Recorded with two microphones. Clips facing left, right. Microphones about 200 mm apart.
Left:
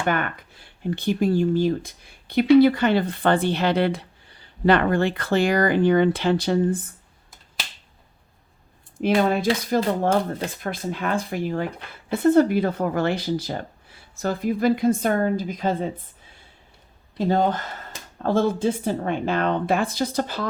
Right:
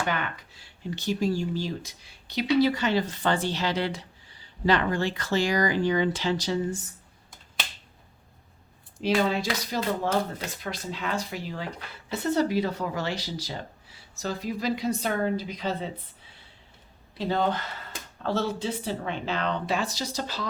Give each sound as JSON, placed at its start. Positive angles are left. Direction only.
{"t": 0.0, "sound": "speech", "side_deg": 55}
{"t": 9.0, "sound": "speech", "side_deg": 55}
{"t": 17.2, "sound": "speech", "side_deg": 45}